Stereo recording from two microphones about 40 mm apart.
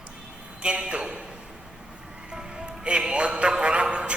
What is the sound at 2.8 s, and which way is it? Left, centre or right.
A man's voice, right.